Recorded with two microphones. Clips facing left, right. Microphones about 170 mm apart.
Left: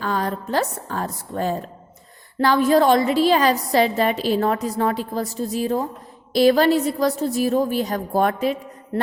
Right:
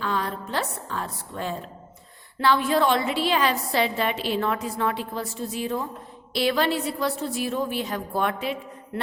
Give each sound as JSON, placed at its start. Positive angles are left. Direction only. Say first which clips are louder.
{"t": 0.0, "sound": "a woman's voice", "louder": "left 4 dB", "side_deg": 45}